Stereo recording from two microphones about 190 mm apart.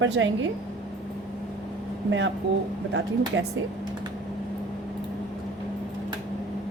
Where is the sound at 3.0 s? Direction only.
65° right (ahead or behind).